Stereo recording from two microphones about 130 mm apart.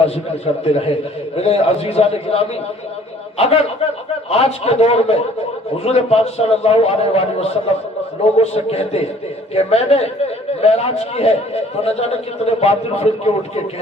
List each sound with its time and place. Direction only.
0.6 s a man's voice: 50° left (ahead or behind)